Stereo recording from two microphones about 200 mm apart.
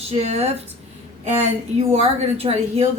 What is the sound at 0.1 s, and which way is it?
Speech, 30° right (ahead or behind).